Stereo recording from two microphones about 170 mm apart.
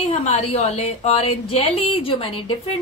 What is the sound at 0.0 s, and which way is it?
A woman's voice, 40° left (ahead or behind).